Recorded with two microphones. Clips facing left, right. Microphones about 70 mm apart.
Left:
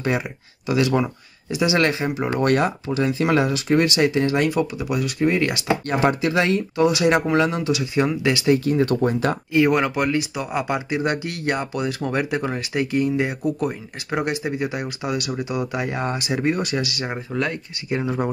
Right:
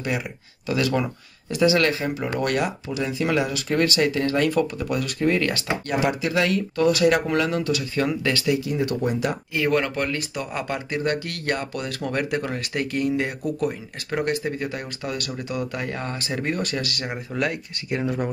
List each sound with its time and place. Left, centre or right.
0.7 s speech: centre
4.5 s speech: centre
5.9 s speech: left; by 8.5 s centre
8.5 s speech: left
9.5 s speech: centre
17.4 s speech: centre
17.9 s speech: centre